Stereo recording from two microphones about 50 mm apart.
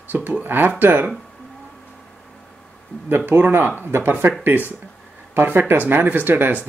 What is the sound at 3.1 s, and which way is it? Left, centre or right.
Speech, right.